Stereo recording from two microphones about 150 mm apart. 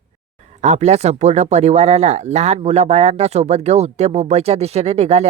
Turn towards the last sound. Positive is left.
turn(degrees=-45)  # may be behind; listen again after turning